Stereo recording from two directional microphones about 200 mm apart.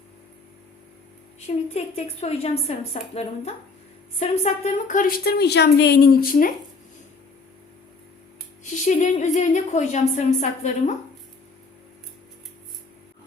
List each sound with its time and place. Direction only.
1.5 s a woman's voice: 35° left (ahead or behind)
8.6 s a woman's voice: 35° left (ahead or behind)